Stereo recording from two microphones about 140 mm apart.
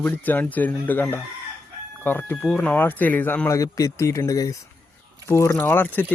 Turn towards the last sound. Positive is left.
turn(degrees=15)  # may be behind; listen again after turning